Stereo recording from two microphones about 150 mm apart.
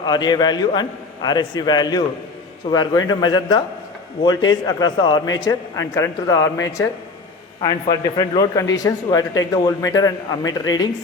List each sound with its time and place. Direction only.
0.0 s a man's voice: 30° left (ahead or behind)